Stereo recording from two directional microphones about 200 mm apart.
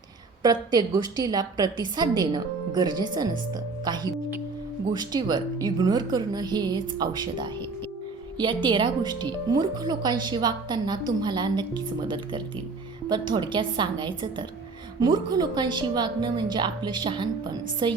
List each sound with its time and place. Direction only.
0.4 s speech: 20° right (ahead or behind)